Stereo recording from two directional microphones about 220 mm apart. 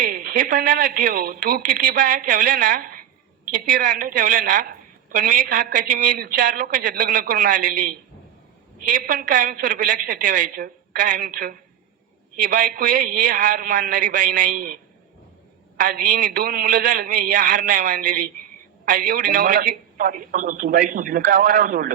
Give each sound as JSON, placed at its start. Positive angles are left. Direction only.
{"t": 0.0, "sound": "a woman's voice", "side_deg": -40}
{"t": 8.9, "sound": "a woman's voice", "side_deg": -35}
{"t": 15.8, "sound": "a woman's voice", "side_deg": -35}